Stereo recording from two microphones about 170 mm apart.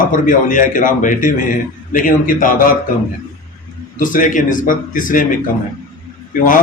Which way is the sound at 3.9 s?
50° left (ahead or behind).